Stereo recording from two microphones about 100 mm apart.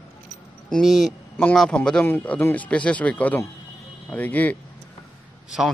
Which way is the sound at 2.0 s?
15° left (ahead or behind).